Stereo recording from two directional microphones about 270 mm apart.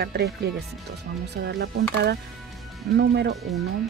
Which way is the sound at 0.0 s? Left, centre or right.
Right.